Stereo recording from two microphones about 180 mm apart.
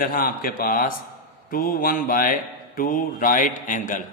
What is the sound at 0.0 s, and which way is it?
A man's voice, 50° left (ahead or behind).